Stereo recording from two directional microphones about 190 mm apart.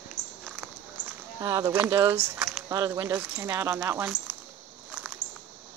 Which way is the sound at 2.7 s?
20° right (ahead or behind).